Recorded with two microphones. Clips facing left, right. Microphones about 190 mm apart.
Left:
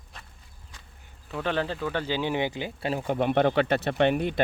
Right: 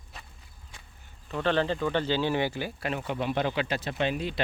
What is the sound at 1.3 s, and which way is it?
Speech, 5° left (ahead or behind).